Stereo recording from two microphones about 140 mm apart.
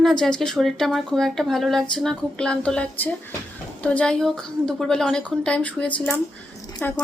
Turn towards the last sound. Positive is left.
turn(degrees=10)  # may be behind; listen again after turning